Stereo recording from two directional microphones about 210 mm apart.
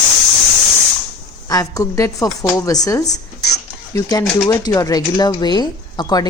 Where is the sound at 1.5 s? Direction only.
15° left (ahead or behind).